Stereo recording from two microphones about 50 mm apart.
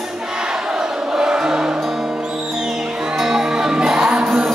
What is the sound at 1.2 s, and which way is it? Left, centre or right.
Music, centre.